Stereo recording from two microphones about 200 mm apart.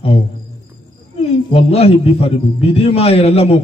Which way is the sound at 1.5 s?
30° left (ahead or behind).